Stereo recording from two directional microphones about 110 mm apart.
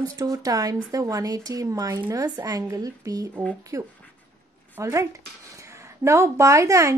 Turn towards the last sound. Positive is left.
turn(degrees=-25)  # may be behind; listen again after turning